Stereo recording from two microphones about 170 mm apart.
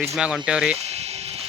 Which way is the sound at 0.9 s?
40° right (ahead or behind).